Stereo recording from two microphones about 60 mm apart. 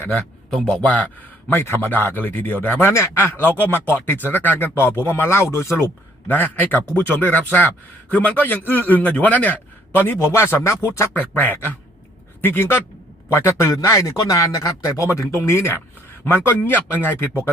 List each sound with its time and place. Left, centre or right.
0.7 s a man's voice: centre
1.5 s speech: left
6.2 s a man's voice: left
10.2 s speech: left
11.1 s speech: left
13.7 s speech: left
15.0 s speech: left
16.2 s speech: left